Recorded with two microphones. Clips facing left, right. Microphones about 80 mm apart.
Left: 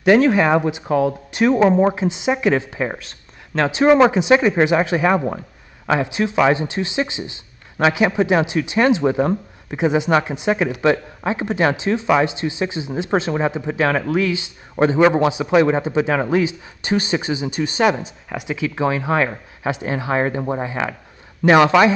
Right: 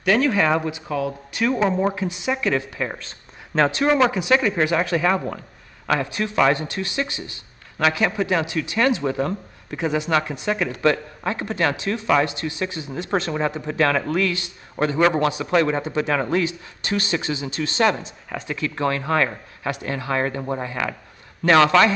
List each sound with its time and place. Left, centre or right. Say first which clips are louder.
0.0 s speech: left 6 dB; left
3.0 s a sound: even; centre
3.7 s speech: left 10 dB; centre